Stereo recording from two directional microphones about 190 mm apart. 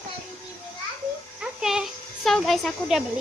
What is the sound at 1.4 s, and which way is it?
Speech, 5° right (ahead or behind).